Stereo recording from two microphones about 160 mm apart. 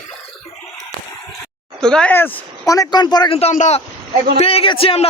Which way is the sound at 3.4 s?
45° left (ahead or behind).